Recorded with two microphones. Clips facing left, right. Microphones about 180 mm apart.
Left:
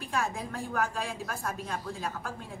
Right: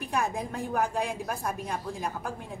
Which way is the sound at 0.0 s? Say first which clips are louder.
Right 3 dB; 15° right (ahead or behind).